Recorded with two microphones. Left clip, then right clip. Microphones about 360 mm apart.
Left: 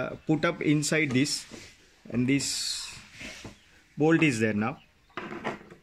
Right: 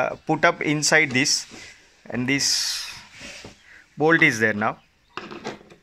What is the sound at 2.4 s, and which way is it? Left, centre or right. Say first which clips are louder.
Speech: right 8 dB; left.